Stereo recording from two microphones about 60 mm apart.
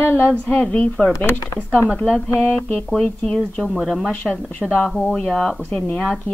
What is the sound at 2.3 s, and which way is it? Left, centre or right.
A woman's voice, left.